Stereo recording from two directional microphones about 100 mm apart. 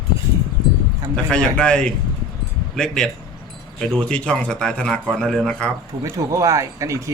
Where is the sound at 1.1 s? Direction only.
10° left (ahead or behind).